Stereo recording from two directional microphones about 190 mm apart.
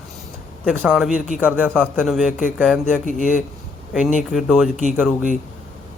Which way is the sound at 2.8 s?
45° left (ahead or behind).